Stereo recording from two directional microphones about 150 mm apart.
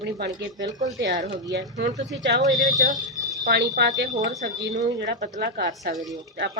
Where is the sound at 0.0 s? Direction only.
90° right.